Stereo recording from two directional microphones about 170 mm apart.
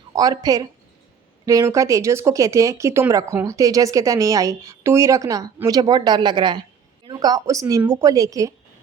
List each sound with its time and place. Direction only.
0.2 s speech: 20° right (ahead or behind)